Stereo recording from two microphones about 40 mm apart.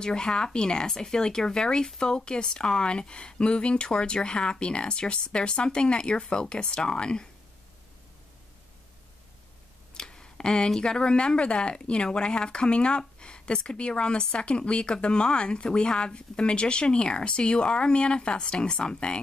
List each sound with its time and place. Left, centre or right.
0.0 s speech: centre
9.9 s a sound: centre
10.8 s speech: left